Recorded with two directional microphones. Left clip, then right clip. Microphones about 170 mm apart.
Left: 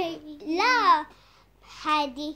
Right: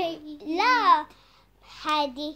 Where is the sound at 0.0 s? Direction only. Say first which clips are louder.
Right 1 dB; 10° right (ahead or behind).